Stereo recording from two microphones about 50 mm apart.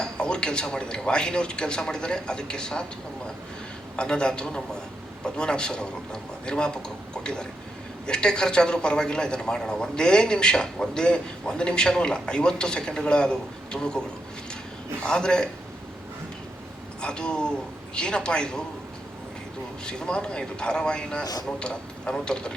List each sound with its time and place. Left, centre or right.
0.0 s a man's voice: centre
3.9 s a man's voice: centre
15.0 s a man's voice: centre
17.0 s a man's voice: centre
19.8 s a man's voice: centre